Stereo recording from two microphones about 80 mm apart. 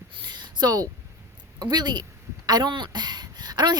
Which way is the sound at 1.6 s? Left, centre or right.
Right.